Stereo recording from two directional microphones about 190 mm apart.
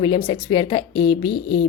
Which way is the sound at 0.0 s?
25° left (ahead or behind).